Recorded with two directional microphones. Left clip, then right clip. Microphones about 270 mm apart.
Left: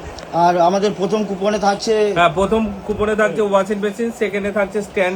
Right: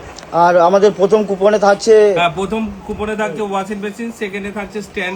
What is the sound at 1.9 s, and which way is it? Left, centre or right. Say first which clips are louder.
Speech: right 10 dB; right.